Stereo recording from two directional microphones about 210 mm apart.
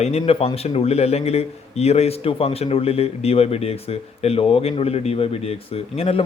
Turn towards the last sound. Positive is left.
turn(degrees=30)  # may be behind; listen again after turning